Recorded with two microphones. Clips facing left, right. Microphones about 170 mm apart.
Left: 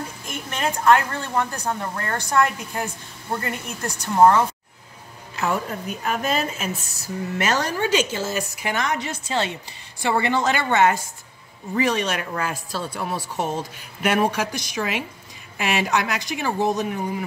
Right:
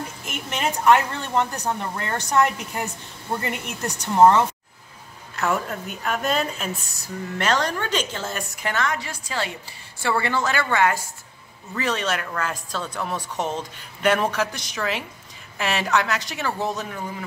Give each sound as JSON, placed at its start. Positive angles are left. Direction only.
{"t": 0.5, "sound": "a woman's voice", "side_deg": -15}
{"t": 5.3, "sound": "a woman's voice", "side_deg": 0}